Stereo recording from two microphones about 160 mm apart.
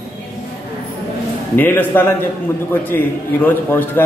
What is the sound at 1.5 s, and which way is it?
A man's voice, 10° left (ahead or behind).